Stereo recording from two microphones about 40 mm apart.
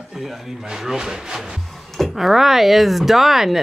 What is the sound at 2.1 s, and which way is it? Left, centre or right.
Speech, centre.